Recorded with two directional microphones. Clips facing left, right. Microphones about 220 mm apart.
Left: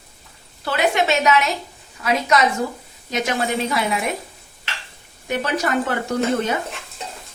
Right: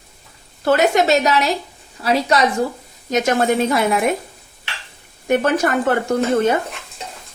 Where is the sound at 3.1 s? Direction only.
45° right (ahead or behind).